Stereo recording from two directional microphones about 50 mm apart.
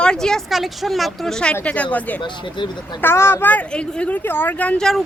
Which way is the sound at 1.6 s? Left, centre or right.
Left.